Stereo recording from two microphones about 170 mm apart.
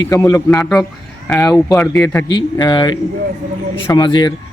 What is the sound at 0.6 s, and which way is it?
Speech, centre (ahead or behind).